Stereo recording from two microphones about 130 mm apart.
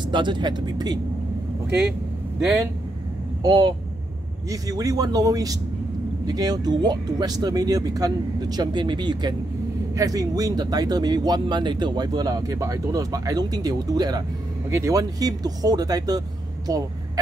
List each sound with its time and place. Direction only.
0.0 s speech: 35° right (ahead or behind)
3.4 s speech: 30° right (ahead or behind)